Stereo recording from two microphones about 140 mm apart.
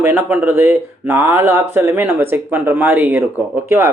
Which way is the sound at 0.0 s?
15° right (ahead or behind).